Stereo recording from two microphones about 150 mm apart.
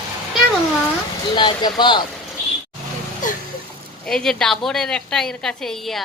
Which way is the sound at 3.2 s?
60° left (ahead or behind).